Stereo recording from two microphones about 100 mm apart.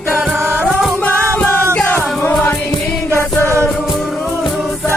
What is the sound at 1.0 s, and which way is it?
Music, 15° left (ahead or behind).